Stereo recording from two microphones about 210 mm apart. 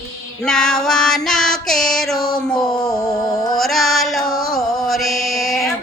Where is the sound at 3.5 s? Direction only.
Centre (ahead or behind).